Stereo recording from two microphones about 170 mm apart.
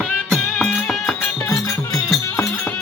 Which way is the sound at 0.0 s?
Centre (ahead or behind).